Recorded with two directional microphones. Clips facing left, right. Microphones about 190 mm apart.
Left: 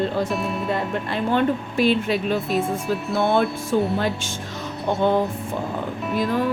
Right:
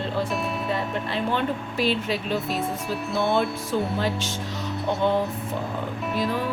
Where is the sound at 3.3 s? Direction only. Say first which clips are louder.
Left 4 dB; 50° left (ahead or behind).